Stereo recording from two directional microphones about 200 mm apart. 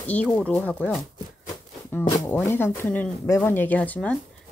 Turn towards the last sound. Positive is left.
turn(degrees=10)  # may be behind; listen again after turning